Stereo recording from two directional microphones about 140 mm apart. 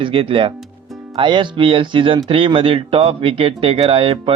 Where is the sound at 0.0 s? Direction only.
40° right (ahead or behind).